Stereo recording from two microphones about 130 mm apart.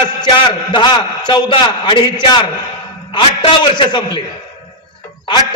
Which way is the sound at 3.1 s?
40° left (ahead or behind).